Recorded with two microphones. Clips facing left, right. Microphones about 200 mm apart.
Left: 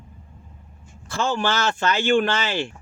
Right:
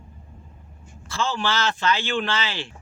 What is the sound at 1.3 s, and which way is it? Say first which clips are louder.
Speech: left 2 dB; 50° left (ahead or behind).